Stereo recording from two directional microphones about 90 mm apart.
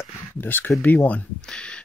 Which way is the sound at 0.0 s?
25° left (ahead or behind).